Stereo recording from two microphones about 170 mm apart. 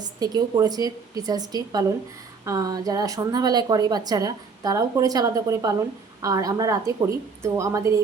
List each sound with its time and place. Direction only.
0.0 s a woman's voice: 25° right (ahead or behind)